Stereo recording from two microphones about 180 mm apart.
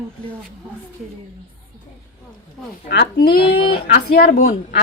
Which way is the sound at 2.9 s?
65° left (ahead or behind).